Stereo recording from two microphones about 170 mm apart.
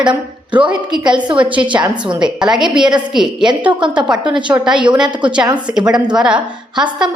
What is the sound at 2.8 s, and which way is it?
Speech, 25° right (ahead or behind).